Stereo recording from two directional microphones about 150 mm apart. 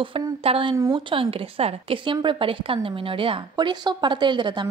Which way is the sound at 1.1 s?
40° right (ahead or behind).